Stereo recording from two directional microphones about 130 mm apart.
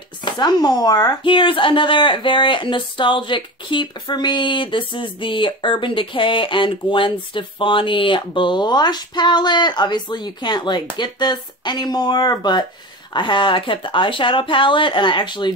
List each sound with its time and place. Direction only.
0.2 s speech: 35° left (ahead or behind)